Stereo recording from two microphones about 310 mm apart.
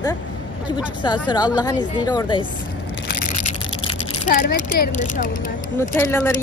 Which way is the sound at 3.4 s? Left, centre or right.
Left.